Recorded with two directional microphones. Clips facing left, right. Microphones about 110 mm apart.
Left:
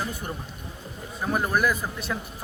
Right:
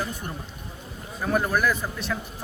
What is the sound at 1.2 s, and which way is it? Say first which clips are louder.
Speech: right 1 dB; 5° left (ahead or behind).